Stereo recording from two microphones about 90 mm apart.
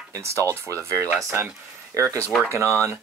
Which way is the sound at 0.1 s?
30° right (ahead or behind).